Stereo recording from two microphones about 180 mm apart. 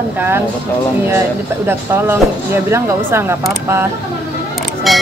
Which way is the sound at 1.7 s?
15° right (ahead or behind).